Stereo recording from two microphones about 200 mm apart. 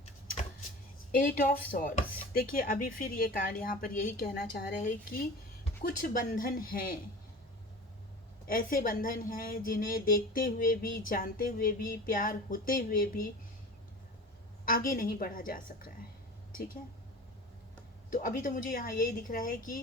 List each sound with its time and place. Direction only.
0.0 s a sound: 35° left (ahead or behind)
1.7 s speech: 45° left (ahead or behind)
8.4 s speech: 45° left (ahead or behind)
14.6 s speech: 45° left (ahead or behind)
18.1 s speech: 45° left (ahead or behind)